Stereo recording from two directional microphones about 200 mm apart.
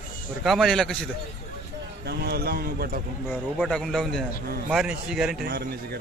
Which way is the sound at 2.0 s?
50° right (ahead or behind).